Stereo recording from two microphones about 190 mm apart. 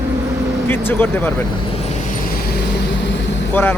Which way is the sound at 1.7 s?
35° left (ahead or behind).